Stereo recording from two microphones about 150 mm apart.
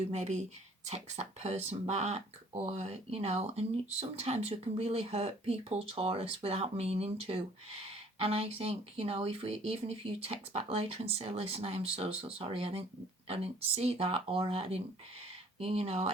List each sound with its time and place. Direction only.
0.0 s speech: 50° right (ahead or behind)